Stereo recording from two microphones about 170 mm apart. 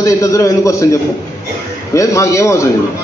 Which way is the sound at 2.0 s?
20° left (ahead or behind).